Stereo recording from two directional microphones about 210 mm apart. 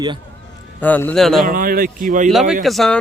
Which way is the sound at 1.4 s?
45° right (ahead or behind).